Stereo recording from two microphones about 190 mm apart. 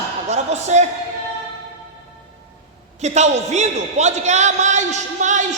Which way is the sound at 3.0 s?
35° right (ahead or behind).